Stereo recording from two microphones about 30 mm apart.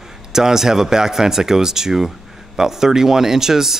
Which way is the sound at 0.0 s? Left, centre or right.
Centre.